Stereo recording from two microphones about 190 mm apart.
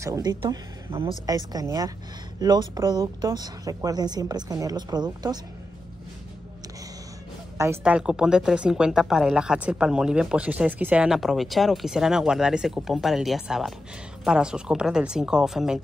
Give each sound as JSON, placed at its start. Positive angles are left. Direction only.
{"t": 0.0, "sound": "a woman's voice", "side_deg": -20}
{"t": 7.5, "sound": "a woman's voice", "side_deg": -15}
{"t": 7.8, "sound": "speech", "side_deg": -5}